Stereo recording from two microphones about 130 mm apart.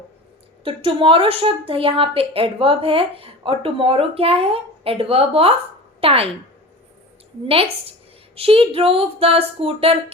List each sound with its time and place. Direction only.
0.6 s a woman's voice: 40° right (ahead or behind)
7.4 s a woman's voice: 50° right (ahead or behind)